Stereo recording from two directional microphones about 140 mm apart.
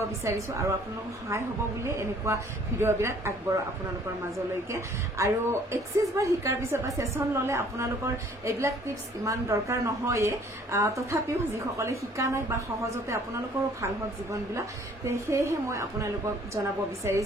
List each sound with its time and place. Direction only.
0.2 s a woman's voice: 20° right (ahead or behind)
4.6 s a woman's voice: 20° right (ahead or behind)